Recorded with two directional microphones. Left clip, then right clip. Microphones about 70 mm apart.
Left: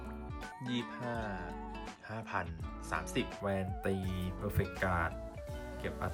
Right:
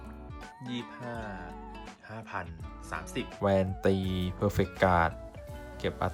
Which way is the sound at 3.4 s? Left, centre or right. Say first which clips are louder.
Right 14 dB; right.